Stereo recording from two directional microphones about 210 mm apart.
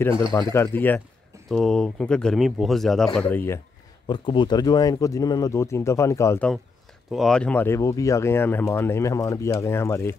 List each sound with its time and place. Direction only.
0.3 s speech: 15° left (ahead or behind)
4.1 s speech: 20° left (ahead or behind)
7.1 s speech: centre (ahead or behind)